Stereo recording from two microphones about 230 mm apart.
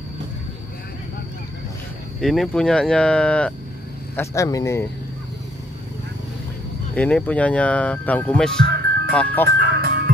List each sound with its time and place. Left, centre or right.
2.1 s speech: centre
7.0 s speech: centre
9.6 s music: right